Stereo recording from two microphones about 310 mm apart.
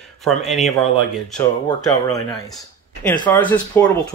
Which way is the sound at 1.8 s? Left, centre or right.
Centre.